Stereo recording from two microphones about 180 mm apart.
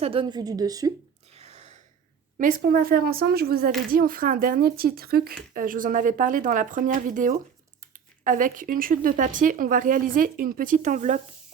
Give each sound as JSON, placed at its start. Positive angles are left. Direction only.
{"t": 0.0, "sound": "a woman's voice", "side_deg": -30}
{"t": 1.3, "sound": "a sound", "side_deg": -35}
{"t": 2.4, "sound": "speech", "side_deg": -50}